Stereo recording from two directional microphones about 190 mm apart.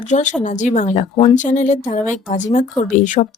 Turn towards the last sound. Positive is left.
turn(degrees=40)  # may be behind; listen again after turning